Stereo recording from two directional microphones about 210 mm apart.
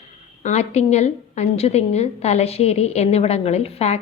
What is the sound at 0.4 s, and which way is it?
A woman's voice, 30° left (ahead or behind).